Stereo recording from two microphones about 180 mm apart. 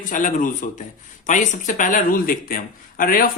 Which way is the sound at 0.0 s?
45° left (ahead or behind).